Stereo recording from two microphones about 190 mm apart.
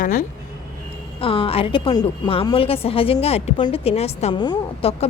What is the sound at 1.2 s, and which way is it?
A woman's voice, 30° left (ahead or behind).